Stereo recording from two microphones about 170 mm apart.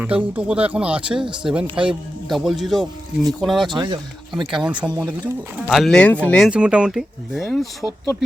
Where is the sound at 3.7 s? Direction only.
25° right (ahead or behind).